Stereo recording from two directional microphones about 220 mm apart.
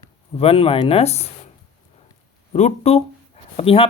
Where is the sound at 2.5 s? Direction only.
30° left (ahead or behind).